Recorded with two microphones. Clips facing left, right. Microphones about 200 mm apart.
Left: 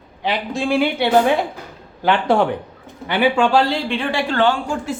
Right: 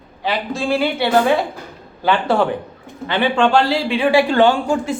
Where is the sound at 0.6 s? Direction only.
15° left (ahead or behind).